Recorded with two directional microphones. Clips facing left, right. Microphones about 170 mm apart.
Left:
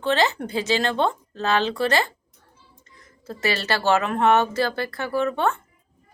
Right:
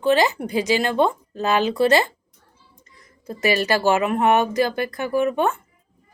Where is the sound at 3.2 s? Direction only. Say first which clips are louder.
Right 4 dB; 15° right (ahead or behind).